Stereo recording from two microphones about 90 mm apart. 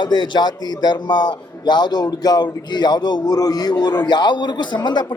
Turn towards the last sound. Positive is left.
turn(degrees=55)  # may be behind; listen again after turning